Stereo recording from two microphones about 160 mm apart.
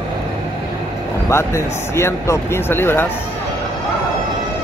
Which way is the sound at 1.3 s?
15° left (ahead or behind).